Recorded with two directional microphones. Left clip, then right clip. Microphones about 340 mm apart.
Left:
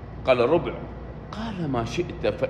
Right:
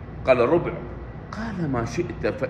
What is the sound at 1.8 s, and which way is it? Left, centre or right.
Speech, centre.